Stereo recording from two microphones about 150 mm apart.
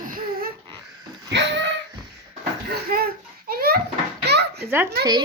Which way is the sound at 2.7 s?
90° right.